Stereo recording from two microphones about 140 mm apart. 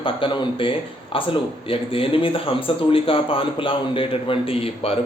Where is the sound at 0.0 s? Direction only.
35° left (ahead or behind).